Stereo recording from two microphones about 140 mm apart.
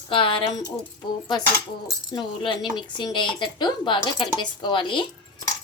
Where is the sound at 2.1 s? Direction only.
30° left (ahead or behind).